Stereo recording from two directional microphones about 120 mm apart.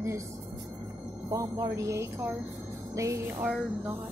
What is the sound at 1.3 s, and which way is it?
Speech, 30° right (ahead or behind).